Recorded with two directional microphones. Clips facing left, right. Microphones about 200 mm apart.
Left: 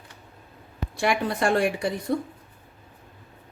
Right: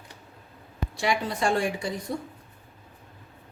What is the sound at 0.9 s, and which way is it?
Speech, 55° left (ahead or behind).